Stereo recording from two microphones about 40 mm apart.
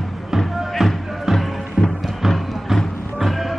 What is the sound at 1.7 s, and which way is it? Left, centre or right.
Music, centre.